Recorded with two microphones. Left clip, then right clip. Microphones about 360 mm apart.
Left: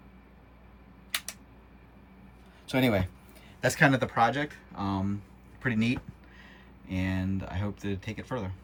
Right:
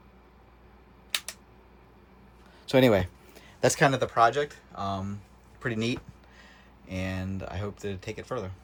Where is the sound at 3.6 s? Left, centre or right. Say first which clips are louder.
Right 1 dB; centre.